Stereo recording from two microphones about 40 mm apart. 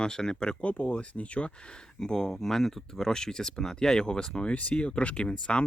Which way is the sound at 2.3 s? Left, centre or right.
Centre.